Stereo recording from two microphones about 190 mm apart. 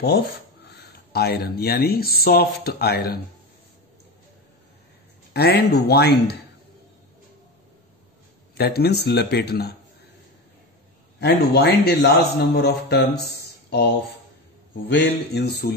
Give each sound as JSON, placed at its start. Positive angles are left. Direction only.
{"t": 0.7, "sound": "speech", "side_deg": 60}
{"t": 5.3, "sound": "a man's voice", "side_deg": 55}
{"t": 8.5, "sound": "a man's voice", "side_deg": 55}
{"t": 11.1, "sound": "a man's voice", "side_deg": 60}